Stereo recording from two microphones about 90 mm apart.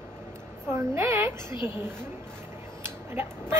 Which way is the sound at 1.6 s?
25° right (ahead or behind).